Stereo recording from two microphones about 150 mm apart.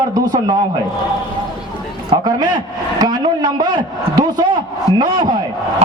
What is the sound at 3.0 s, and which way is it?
A man's voice, 25° right (ahead or behind).